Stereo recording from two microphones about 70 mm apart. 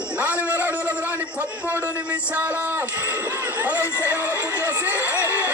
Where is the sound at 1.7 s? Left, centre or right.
Right.